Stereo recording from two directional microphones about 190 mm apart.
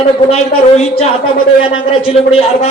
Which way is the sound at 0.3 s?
35° left (ahead or behind).